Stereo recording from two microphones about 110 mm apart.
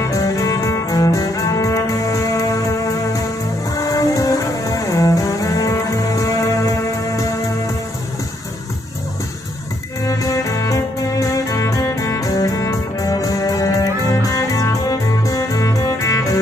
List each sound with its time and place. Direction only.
0.0 s cello: 30° left (ahead or behind)
3.7 s music: 30° left (ahead or behind)
10.0 s music: 30° left (ahead or behind)